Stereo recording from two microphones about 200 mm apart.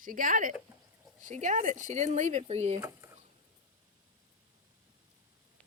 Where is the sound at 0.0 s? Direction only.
40° right (ahead or behind).